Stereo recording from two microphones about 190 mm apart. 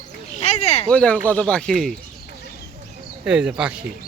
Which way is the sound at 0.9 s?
5° left (ahead or behind).